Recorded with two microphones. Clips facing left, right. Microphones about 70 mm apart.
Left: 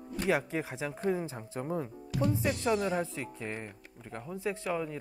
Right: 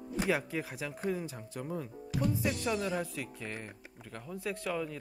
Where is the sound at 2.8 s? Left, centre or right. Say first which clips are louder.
Left 3 dB; centre.